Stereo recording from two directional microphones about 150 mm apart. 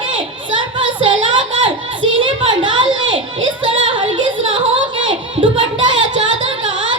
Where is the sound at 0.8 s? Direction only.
35° right (ahead or behind).